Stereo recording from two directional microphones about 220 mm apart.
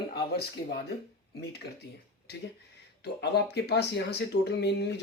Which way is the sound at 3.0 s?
50° left (ahead or behind).